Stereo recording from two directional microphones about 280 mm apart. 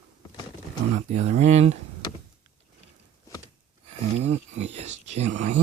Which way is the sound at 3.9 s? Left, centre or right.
Right.